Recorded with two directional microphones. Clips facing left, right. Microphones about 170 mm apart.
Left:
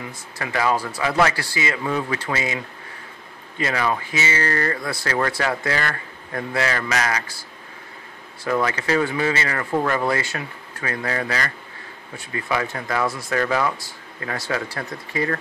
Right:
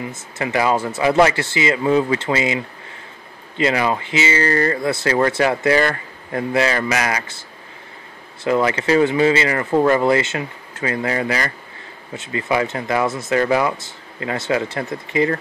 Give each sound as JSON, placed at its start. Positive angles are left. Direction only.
{"t": 0.1, "sound": "speech", "side_deg": -20}
{"t": 8.5, "sound": "speech", "side_deg": -25}